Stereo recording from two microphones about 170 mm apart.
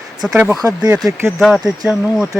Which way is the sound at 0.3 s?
5° right (ahead or behind).